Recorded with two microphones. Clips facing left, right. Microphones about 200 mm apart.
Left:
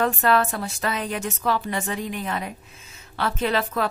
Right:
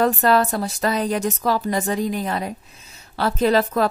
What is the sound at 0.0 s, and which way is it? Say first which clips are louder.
Speech: right 3 dB; 40° right (ahead or behind).